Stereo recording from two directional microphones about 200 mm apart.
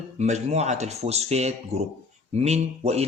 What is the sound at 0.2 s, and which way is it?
A man's voice, 35° right (ahead or behind).